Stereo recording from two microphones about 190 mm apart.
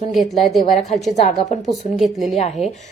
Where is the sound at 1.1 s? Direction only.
35° left (ahead or behind).